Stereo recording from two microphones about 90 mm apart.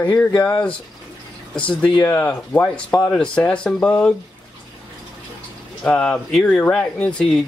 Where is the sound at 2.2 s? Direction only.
20° left (ahead or behind).